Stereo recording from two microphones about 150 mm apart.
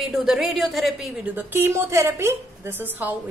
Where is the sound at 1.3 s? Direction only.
15° right (ahead or behind).